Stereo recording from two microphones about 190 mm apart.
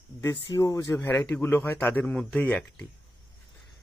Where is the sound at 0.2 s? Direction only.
15° left (ahead or behind).